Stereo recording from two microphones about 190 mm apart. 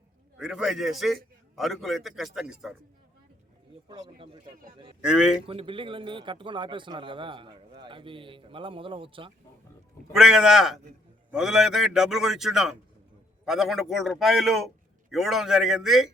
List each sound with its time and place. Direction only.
0.3 s a man's voice: 5° right (ahead or behind)
3.8 s speech: 25° right (ahead or behind)
5.0 s a man's voice: 5° right (ahead or behind)
5.5 s speech: 30° right (ahead or behind)
10.1 s a man's voice: 5° right (ahead or behind)